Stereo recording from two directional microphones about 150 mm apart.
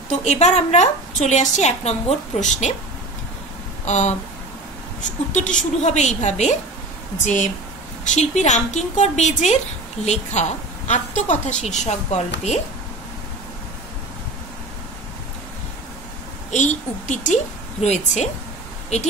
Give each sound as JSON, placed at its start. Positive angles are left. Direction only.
{"t": 0.1, "sound": "a woman's voice", "side_deg": 50}
{"t": 3.8, "sound": "a sound", "side_deg": 50}
{"t": 5.3, "sound": "a woman's voice", "side_deg": 55}
{"t": 16.5, "sound": "a woman's voice", "side_deg": 55}